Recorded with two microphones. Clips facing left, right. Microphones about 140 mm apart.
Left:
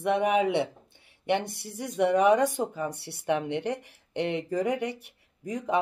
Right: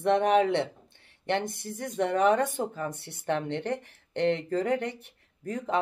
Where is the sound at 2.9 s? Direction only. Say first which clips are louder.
Left 3 dB; 20° right (ahead or behind).